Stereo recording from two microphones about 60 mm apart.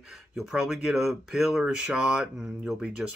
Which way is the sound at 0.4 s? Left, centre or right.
Centre.